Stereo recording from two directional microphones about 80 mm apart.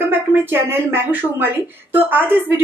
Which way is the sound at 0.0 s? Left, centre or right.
Right.